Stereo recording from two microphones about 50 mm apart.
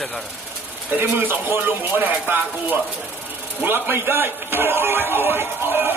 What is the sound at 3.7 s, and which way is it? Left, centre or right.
Speech, right.